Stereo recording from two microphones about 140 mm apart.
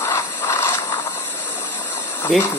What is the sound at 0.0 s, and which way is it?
Mechanisms, 20° left (ahead or behind).